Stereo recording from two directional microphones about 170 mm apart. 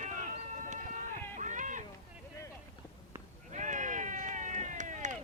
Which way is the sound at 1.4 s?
45° right (ahead or behind).